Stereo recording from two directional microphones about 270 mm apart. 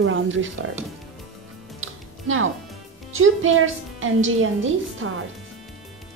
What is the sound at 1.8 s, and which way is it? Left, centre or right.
Music, right.